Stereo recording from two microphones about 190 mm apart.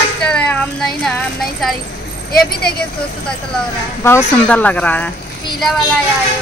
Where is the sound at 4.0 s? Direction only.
15° left (ahead or behind).